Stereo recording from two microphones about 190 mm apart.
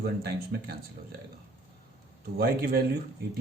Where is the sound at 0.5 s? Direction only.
60° right (ahead or behind).